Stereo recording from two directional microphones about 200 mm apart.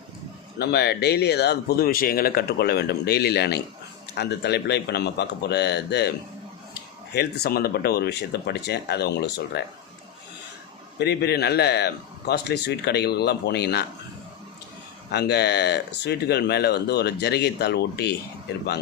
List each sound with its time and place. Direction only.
0.6 s speech: 55° left (ahead or behind)
10.9 s speech: 55° left (ahead or behind)
15.1 s speech: 55° left (ahead or behind)